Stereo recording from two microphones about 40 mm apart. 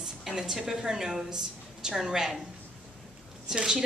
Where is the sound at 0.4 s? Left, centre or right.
Centre.